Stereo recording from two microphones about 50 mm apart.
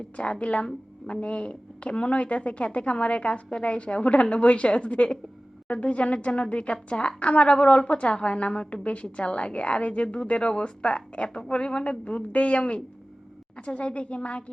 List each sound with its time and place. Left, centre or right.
0.2 s a woman's voice: left